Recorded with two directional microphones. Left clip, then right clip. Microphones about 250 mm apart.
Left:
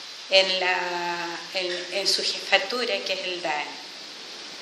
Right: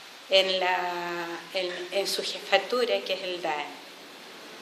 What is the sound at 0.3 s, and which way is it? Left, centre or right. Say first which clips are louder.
A woman's voice: left 2 dB; centre.